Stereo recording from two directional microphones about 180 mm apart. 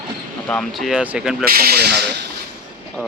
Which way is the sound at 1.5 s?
60° right (ahead or behind).